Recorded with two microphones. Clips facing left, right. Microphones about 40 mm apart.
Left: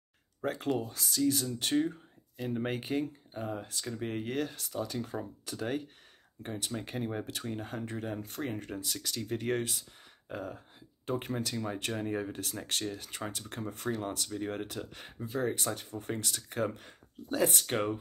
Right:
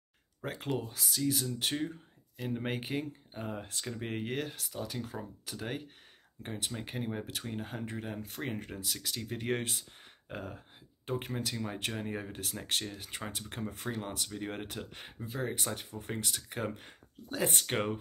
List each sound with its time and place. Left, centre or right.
0.4 s speech: centre
3.3 s speech: right
4.4 s speech: centre
6.4 s speech: right
8.4 s speech: right
8.6 s speech: centre
9.6 s speech: right
11.1 s speech: centre
11.5 s speech: centre
15.1 s speech: centre
15.4 s speech: centre
17.6 s speech: right